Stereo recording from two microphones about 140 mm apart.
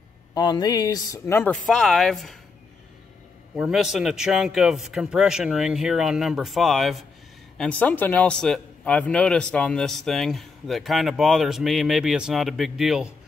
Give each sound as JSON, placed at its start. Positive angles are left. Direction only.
{"t": 0.3, "sound": "speech", "side_deg": 30}
{"t": 1.7, "sound": "a man's voice", "side_deg": 0}
{"t": 3.5, "sound": "a man's voice", "side_deg": -5}
{"t": 7.8, "sound": "a man's voice", "side_deg": 10}